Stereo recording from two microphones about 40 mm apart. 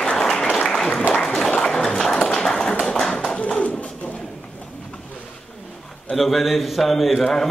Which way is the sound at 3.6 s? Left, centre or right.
Left.